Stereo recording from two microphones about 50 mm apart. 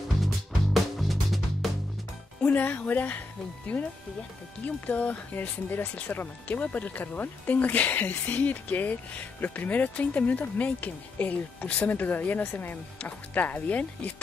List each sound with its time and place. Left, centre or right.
0.9 s music: centre
2.4 s speech: left
3.7 s speech: left